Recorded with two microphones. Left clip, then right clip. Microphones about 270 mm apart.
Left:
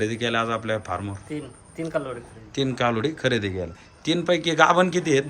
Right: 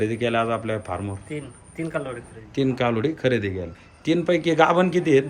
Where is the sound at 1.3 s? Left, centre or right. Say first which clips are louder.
Even; centre.